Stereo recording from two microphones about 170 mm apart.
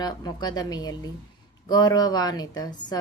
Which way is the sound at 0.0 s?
25° left (ahead or behind).